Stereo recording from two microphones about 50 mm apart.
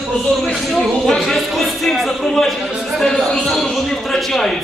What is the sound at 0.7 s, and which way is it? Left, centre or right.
A man's voice, centre.